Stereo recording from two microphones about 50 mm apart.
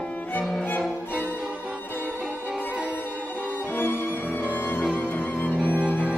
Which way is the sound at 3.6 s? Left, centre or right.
Left.